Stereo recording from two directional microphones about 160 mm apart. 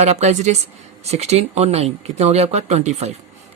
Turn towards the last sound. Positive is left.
turn(degrees=-45)  # may be behind; listen again after turning